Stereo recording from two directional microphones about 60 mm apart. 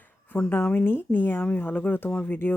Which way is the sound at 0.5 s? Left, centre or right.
Left.